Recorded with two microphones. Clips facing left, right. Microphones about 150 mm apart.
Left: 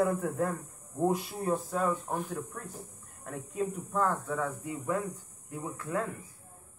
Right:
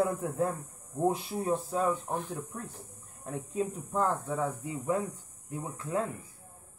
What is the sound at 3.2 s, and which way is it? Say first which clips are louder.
Speech: right 1 dB; 25° right (ahead or behind).